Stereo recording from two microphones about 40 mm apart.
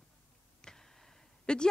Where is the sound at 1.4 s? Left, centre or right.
Left.